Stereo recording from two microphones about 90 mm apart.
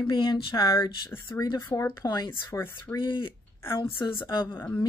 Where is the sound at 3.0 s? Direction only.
70° left (ahead or behind).